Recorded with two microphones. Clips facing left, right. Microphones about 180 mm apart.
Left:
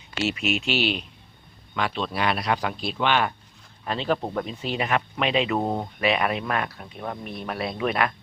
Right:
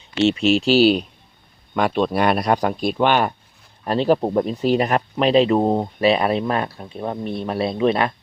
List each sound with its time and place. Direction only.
0.2 s speech: 30° right (ahead or behind)
1.7 s speech: 50° right (ahead or behind); by 8.1 s 25° right (ahead or behind)